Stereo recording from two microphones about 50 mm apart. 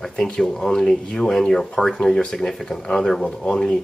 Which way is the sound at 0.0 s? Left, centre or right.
Centre.